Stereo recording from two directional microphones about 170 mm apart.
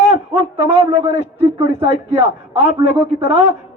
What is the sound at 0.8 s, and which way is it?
A man's voice, 15° right (ahead or behind).